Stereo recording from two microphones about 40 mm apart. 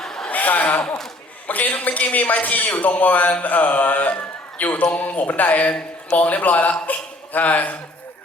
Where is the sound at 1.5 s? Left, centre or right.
Left.